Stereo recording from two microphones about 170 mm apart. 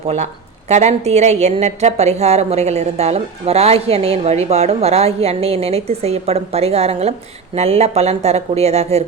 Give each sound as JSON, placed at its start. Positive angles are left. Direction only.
{"t": 0.7, "sound": "a woman's voice", "side_deg": -40}